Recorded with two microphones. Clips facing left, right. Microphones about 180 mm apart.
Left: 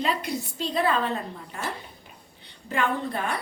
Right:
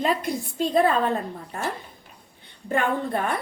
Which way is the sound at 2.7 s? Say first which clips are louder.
Right 3 dB; 50° right (ahead or behind).